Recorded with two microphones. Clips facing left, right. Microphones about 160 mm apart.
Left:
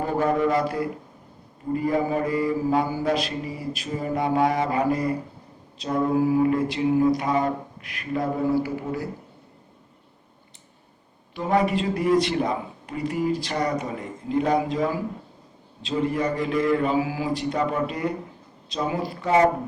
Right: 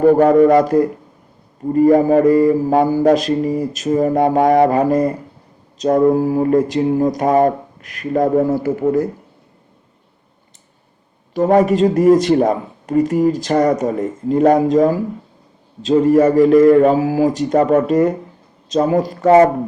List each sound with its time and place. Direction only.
0.3 s speech: 45° right (ahead or behind)
11.3 s speech: 45° right (ahead or behind)